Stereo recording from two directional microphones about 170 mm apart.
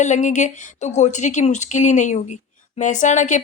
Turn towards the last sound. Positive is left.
turn(degrees=45)  # may be behind; listen again after turning